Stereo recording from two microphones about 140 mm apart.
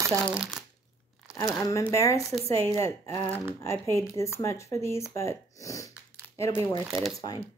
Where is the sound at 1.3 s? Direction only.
25° left (ahead or behind).